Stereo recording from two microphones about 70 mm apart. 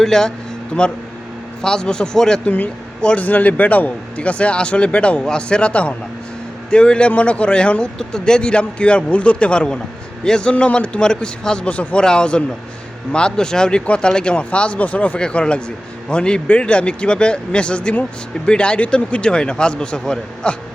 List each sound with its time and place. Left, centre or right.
0.0 s speech: centre